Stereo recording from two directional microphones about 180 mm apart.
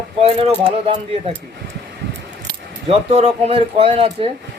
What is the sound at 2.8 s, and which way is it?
Speech, 35° right (ahead or behind).